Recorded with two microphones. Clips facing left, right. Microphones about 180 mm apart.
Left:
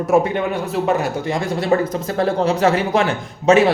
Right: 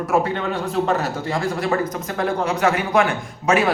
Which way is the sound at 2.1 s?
30° left (ahead or behind).